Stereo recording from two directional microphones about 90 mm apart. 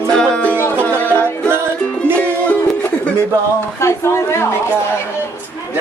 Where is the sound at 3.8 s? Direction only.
30° left (ahead or behind).